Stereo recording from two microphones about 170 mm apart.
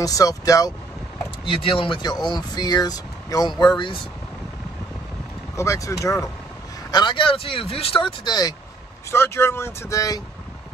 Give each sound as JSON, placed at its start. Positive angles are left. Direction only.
{"t": 0.0, "sound": "speech", "side_deg": 20}
{"t": 5.6, "sound": "speech", "side_deg": 15}